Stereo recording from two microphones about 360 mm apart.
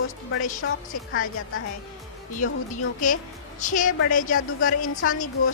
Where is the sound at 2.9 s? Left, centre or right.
Left.